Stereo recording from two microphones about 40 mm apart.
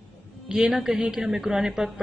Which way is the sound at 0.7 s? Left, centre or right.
Centre.